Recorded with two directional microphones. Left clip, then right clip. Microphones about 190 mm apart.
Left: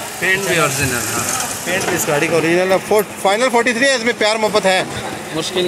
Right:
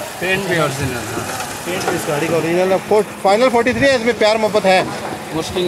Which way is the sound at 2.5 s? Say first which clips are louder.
Left 1 dB; centre (ahead or behind).